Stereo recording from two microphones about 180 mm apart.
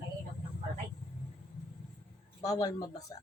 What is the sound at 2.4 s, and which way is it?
Speech, 20° left (ahead or behind).